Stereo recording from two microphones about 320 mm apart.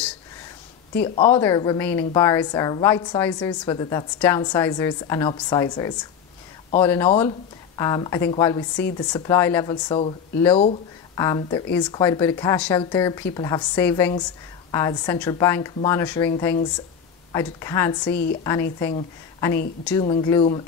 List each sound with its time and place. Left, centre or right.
1.0 s a woman's voice: centre
18.1 s a woman's voice: left
18.4 s a woman's voice: centre